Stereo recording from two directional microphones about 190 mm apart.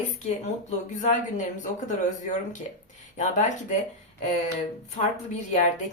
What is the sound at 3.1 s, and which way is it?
Speech, 40° left (ahead or behind).